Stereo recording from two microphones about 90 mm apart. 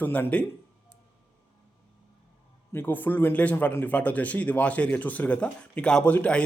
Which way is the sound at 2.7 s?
25° left (ahead or behind).